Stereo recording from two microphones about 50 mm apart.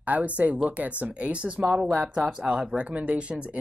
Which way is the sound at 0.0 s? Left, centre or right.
Right.